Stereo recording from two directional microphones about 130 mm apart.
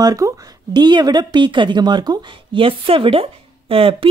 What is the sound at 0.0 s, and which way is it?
A woman's voice, 25° right (ahead or behind).